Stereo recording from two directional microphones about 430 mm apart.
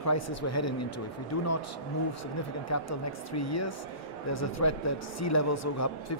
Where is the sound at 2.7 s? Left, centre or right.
Left.